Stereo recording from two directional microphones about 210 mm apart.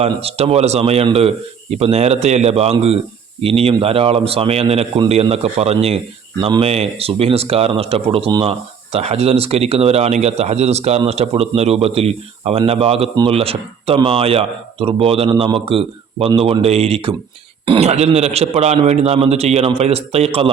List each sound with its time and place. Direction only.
0.0 s speech: 30° right (ahead or behind)